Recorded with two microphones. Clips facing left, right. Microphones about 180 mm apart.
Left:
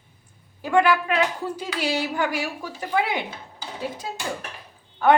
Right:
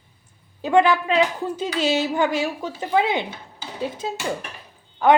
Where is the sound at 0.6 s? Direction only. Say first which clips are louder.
Right 2 dB; 20° right (ahead or behind).